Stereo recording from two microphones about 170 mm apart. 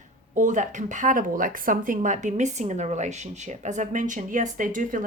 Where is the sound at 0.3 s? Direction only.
45° right (ahead or behind).